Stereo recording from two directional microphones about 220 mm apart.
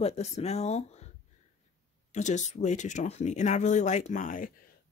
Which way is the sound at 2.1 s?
35° left (ahead or behind).